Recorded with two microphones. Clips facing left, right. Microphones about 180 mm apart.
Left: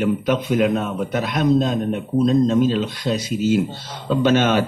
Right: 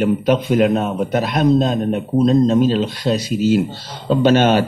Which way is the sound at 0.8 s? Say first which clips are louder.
Right 4 dB; 35° right (ahead or behind).